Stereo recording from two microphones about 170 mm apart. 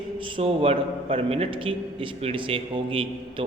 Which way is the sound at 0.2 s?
30° right (ahead or behind).